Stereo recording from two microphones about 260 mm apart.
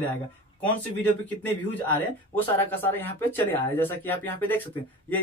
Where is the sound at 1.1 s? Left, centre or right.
Centre.